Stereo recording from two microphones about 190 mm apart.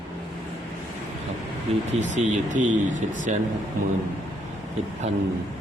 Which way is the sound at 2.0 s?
40° right (ahead or behind).